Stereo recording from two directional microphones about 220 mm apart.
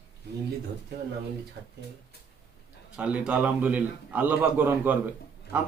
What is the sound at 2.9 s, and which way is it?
A man's voice, 5° right (ahead or behind).